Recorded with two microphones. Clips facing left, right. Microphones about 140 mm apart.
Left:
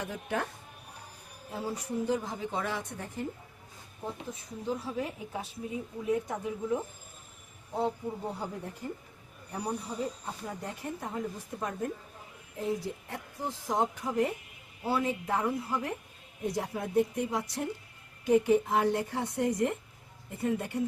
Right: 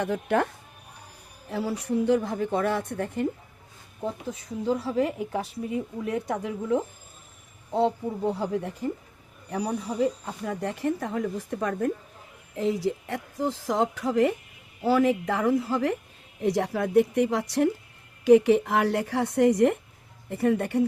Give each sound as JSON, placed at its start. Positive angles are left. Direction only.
{"t": 0.0, "sound": "a woman's voice", "side_deg": -65}
{"t": 1.5, "sound": "a woman's voice", "side_deg": -75}
{"t": 4.3, "sound": "a woman's voice", "side_deg": -90}
{"t": 12.5, "sound": "a woman's voice", "side_deg": -90}